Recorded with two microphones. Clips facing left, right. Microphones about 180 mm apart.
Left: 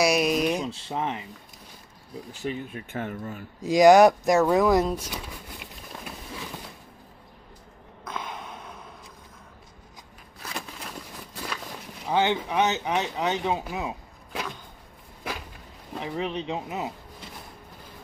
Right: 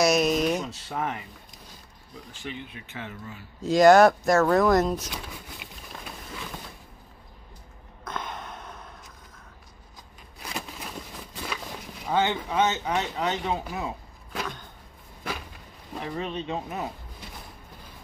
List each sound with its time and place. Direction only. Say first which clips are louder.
0.0 s speech: even; 10° left (ahead or behind)
0.7 s speech: left 1 dB; 25° left (ahead or behind)
2.4 s speech: left 6 dB; 45° left (ahead or behind)
3.6 s speech: left 1 dB; 15° left (ahead or behind)
8.0 s a sound: even; 5° left (ahead or behind)
12.1 s speech: left 1 dB; 15° left (ahead or behind)
16.0 s speech: left 2 dB; 15° left (ahead or behind)